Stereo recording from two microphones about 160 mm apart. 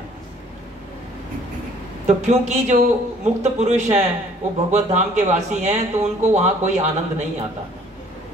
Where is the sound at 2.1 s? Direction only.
45° right (ahead or behind).